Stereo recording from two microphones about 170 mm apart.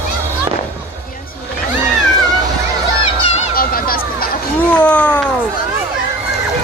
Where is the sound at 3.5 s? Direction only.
60° left (ahead or behind).